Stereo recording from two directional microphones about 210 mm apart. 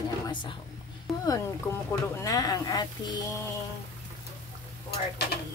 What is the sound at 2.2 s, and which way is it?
Speech, 15° left (ahead or behind).